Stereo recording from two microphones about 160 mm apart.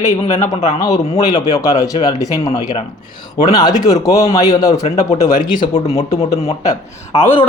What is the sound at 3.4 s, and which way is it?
Speech, 25° left (ahead or behind).